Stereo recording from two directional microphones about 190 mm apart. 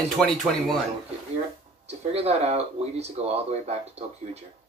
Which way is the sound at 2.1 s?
35° right (ahead or behind).